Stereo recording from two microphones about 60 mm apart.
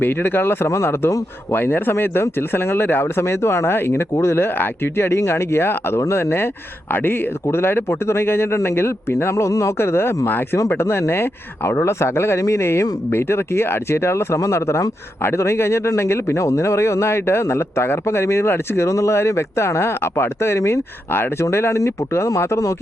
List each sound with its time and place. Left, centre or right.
0.0 s a man's voice: left
1.5 s a man's voice: left
9.3 s speech: left
10.2 s a man's voice: left
10.7 s speech: left
18.9 s speech: left